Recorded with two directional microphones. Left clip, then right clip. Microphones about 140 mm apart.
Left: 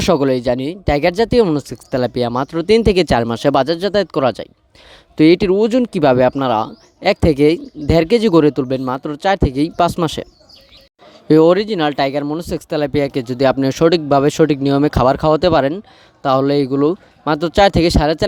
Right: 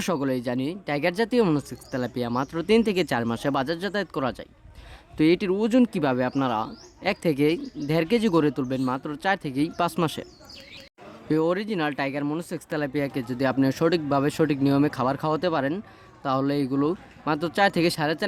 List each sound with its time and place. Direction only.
0.0 s speech: 50° left (ahead or behind)
11.3 s speech: 55° left (ahead or behind)